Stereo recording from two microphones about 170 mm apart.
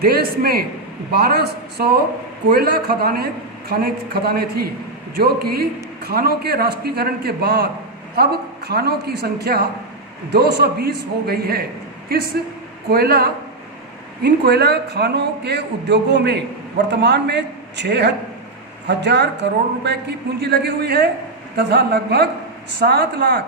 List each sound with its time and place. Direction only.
0.0 s a man's voice: 65° right (ahead or behind)
14.2 s a man's voice: 75° right (ahead or behind)